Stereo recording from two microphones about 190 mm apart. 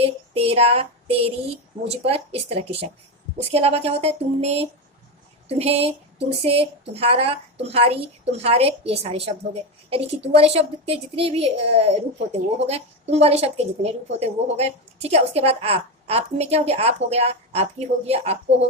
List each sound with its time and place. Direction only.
0.0 s a woman's voice: 30° right (ahead or behind)